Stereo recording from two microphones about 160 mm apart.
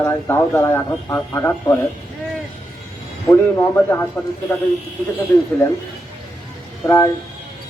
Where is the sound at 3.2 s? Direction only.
15° left (ahead or behind).